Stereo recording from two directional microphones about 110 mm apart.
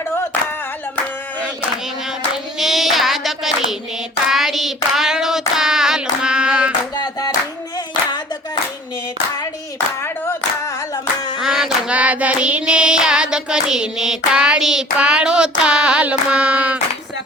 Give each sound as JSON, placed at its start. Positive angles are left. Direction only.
{"t": 2.3, "sound": "hands", "side_deg": -5}
{"t": 4.3, "sound": "child singing", "side_deg": 0}
{"t": 6.9, "sound": "music", "side_deg": 40}
{"t": 10.7, "sound": "hands", "side_deg": 30}
{"t": 11.3, "sound": "female singing", "side_deg": -5}